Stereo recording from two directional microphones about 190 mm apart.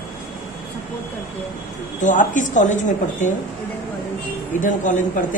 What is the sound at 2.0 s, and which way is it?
Speech, 40° left (ahead or behind).